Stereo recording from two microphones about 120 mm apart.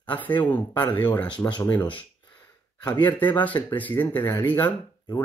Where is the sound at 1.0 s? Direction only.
40° left (ahead or behind).